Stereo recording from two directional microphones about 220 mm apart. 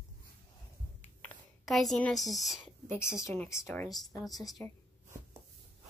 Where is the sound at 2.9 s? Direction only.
10° left (ahead or behind).